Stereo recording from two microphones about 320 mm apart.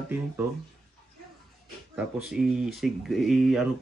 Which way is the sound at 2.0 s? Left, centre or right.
Centre.